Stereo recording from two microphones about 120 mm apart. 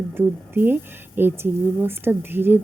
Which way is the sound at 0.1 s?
15° right (ahead or behind).